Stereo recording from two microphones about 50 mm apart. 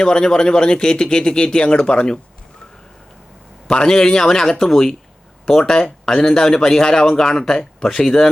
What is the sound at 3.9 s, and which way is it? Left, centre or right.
Speech, centre.